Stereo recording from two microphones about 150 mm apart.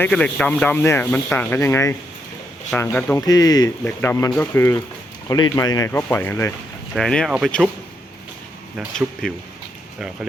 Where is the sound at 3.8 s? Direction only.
15° left (ahead or behind).